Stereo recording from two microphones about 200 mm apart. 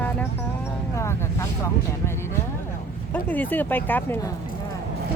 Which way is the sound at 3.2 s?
10° left (ahead or behind).